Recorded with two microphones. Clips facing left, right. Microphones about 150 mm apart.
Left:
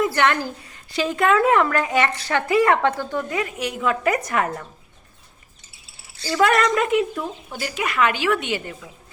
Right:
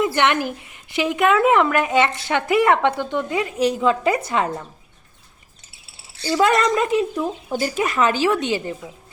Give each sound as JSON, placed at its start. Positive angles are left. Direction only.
{"t": 0.0, "sound": "a woman's voice", "side_deg": -20}
{"t": 6.2, "sound": "a woman's voice", "side_deg": -20}